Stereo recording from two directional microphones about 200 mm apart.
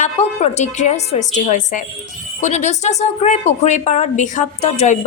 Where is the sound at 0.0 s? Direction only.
35° left (ahead or behind).